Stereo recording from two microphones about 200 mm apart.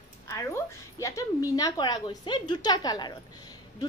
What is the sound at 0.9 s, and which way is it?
A woman's voice, 15° left (ahead or behind).